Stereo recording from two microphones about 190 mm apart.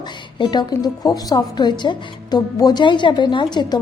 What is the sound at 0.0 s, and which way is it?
Speech, 25° left (ahead or behind).